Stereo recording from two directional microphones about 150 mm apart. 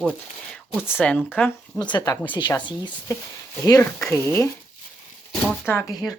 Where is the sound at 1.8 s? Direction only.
30° left (ahead or behind).